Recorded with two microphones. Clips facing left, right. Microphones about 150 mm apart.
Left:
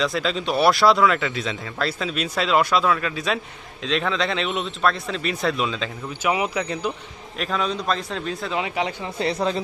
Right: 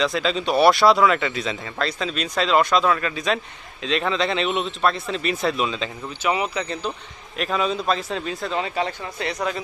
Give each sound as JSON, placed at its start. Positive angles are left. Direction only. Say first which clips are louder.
{"t": 0.0, "sound": "speech", "louder": "right 1 dB", "side_deg": 0}
{"t": 6.2, "sound": "speech", "louder": "left 1 dB", "side_deg": 10}
{"t": 7.3, "sound": "speech", "louder": "right 2 dB", "side_deg": -5}
{"t": 8.6, "sound": "speech", "louder": "even", "side_deg": 15}
{"t": 9.2, "sound": "speech", "louder": "left 3 dB", "side_deg": 30}